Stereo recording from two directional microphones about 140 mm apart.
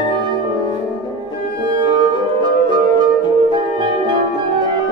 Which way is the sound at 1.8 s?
30° right (ahead or behind).